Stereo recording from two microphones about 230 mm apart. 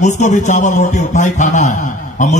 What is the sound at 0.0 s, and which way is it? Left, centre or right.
A man's voice, left.